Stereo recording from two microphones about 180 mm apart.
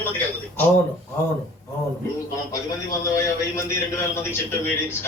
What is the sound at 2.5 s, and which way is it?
A man's voice, 15° left (ahead or behind).